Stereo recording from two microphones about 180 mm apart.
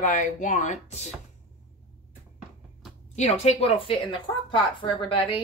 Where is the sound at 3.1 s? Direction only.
35° left (ahead or behind).